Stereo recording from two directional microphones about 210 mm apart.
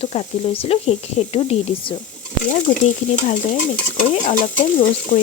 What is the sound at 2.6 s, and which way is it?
Stir, 35° left (ahead or behind).